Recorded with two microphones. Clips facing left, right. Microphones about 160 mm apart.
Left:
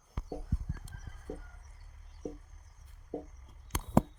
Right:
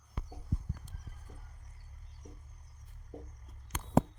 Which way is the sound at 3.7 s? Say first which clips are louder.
Left 3 dB; 35° left (ahead or behind).